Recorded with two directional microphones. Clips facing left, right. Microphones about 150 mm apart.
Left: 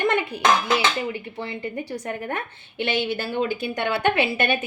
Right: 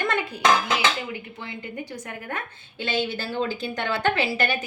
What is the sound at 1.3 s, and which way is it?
Speech, 35° left (ahead or behind).